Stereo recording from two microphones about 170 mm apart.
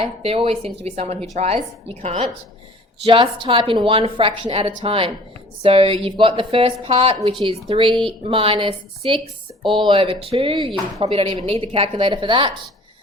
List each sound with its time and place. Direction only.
0.0 s a woman's voice: 35° right (ahead or behind)